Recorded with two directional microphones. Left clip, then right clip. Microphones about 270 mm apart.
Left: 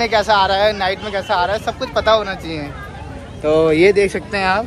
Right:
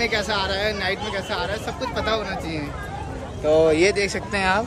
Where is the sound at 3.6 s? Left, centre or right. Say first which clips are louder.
Left 6 dB; centre.